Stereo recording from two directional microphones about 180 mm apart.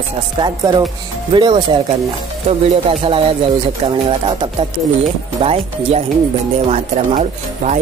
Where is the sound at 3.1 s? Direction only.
30° right (ahead or behind).